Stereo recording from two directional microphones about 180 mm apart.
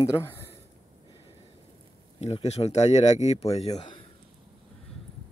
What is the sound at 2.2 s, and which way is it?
Speech, 35° left (ahead or behind).